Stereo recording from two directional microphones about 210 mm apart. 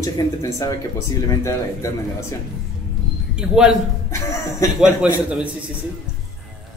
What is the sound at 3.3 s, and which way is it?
Speech, 5° right (ahead or behind).